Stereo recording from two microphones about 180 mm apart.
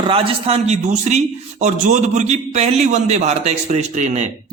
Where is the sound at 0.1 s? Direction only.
35° right (ahead or behind).